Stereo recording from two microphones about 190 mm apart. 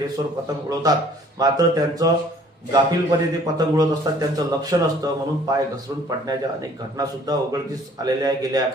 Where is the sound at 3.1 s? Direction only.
20° right (ahead or behind).